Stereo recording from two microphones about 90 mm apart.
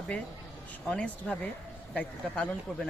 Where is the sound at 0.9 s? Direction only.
10° left (ahead or behind).